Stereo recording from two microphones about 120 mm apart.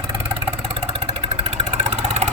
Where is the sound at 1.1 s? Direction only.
65° right (ahead or behind).